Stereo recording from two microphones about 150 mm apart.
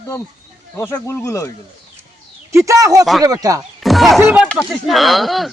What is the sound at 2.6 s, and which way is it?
Speech, 25° right (ahead or behind).